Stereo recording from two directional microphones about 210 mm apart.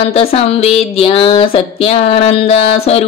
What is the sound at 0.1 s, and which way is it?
Speech, 30° left (ahead or behind).